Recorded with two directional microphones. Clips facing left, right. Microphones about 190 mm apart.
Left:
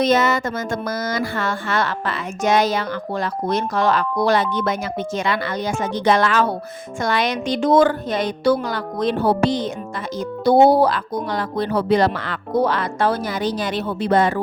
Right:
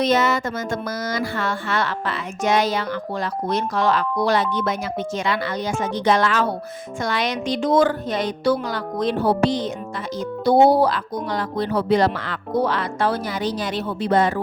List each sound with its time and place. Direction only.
0.0 s a woman's voice: 50° left (ahead or behind)